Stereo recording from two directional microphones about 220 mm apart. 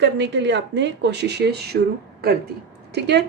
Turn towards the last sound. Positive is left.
turn(degrees=-50)  # may be behind; listen again after turning